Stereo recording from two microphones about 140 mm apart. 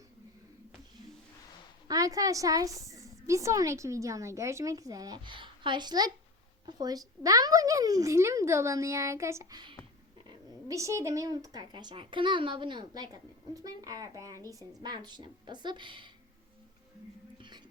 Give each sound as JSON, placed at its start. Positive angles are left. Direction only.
{"t": 1.9, "sound": "a woman's voice", "side_deg": -25}
{"t": 17.3, "sound": "whispering", "side_deg": -35}